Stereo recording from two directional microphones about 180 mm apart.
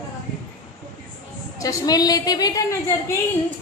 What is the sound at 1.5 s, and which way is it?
A woman's voice, 20° left (ahead or behind).